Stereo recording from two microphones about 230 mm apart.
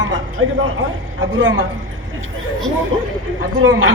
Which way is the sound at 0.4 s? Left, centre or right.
Right.